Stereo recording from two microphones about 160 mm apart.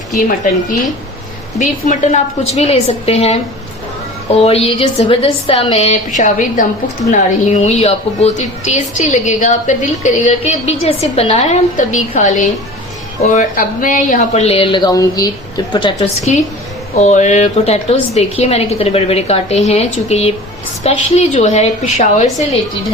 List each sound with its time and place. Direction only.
1.5 s a woman's voice: 50° left (ahead or behind); by 16.0 s 30° left (ahead or behind)
16.3 s a woman's voice: 45° left (ahead or behind)